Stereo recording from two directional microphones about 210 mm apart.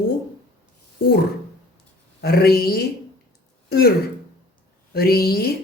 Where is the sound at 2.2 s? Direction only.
45° left (ahead or behind).